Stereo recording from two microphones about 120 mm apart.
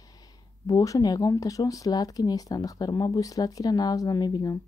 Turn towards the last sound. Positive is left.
turn(degrees=35)  # may be behind; listen again after turning